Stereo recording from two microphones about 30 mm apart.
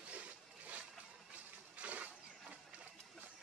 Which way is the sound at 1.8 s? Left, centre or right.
Right.